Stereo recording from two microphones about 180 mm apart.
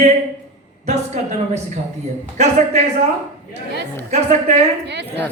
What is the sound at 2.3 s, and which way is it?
Speech, 40° right (ahead or behind).